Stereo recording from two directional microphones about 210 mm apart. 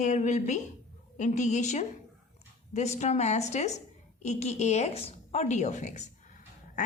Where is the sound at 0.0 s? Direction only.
35° left (ahead or behind).